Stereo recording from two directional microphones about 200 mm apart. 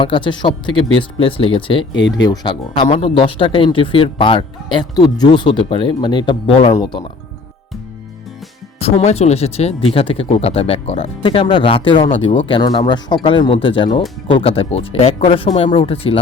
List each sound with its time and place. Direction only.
0.0 s speech: 25° left (ahead or behind)
1.9 s speech: 65° left (ahead or behind)
2.1 s speech: 20° left (ahead or behind)
8.8 s speech: 30° left (ahead or behind)